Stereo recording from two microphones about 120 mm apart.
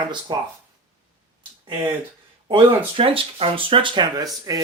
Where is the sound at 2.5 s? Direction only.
50° right (ahead or behind); by 4.6 s 30° right (ahead or behind).